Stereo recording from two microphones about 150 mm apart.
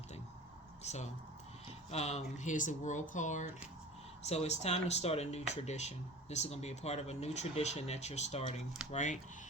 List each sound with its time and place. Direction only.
0.8 s speech: 50° left (ahead or behind)